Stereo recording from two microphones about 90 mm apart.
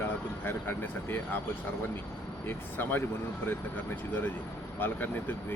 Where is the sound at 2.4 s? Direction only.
25° left (ahead or behind).